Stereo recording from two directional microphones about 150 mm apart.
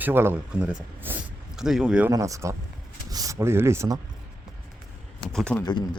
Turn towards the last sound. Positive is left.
turn(degrees=30)  # may be behind; listen again after turning